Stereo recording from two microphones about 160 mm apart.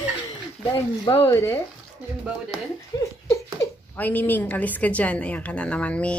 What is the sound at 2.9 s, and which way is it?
Speech, 25° left (ahead or behind).